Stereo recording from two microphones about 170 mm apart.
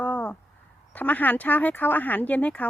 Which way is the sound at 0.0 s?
10° left (ahead or behind).